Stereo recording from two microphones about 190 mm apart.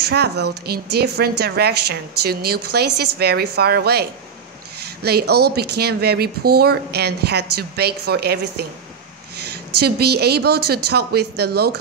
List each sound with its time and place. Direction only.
0.0 s a woman's voice: 60° right (ahead or behind)
5.0 s a woman's voice: 55° right (ahead or behind)